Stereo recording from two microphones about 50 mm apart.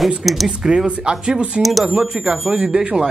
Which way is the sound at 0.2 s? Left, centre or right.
Centre.